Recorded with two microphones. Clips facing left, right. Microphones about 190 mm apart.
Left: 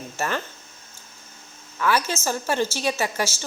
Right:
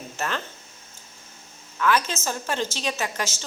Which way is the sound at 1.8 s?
10° left (ahead or behind).